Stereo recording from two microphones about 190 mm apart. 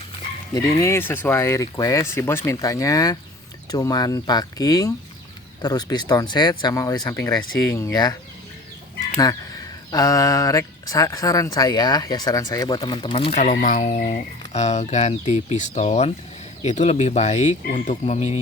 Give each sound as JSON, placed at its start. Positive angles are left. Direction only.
{"t": 0.5, "sound": "speech", "side_deg": 15}
{"t": 9.9, "sound": "speech", "side_deg": 20}